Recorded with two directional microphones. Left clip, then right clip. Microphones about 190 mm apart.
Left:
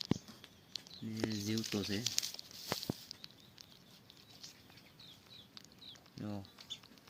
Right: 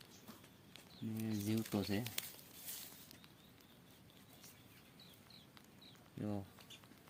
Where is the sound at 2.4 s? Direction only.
45° right (ahead or behind).